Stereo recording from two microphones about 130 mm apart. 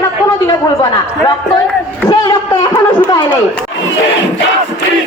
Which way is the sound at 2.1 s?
30° left (ahead or behind).